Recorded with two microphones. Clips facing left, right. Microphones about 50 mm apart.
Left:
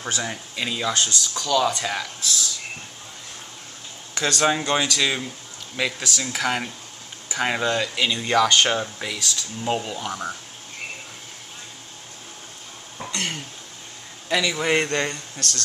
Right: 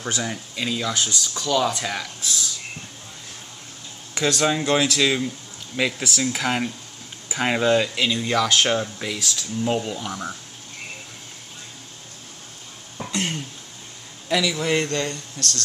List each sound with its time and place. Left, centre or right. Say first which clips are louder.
0.0 s speech: right 1 dB; centre
0.9 s speech: left 1 dB; centre
4.2 s speech: even; centre
12.9 s cough: right 2 dB; centre
14.3 s speech: right 1 dB; centre
14.6 s speech: left 1 dB; left